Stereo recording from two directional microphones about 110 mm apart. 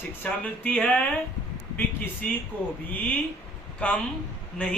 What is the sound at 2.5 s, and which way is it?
Speech, 15° left (ahead or behind).